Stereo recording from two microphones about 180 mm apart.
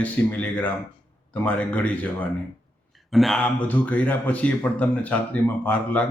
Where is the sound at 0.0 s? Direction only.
10° left (ahead or behind).